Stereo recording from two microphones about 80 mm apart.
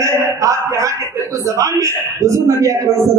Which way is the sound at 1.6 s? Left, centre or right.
Right.